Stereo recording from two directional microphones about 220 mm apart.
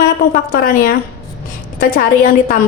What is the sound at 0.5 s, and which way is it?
A woman's voice, 40° left (ahead or behind).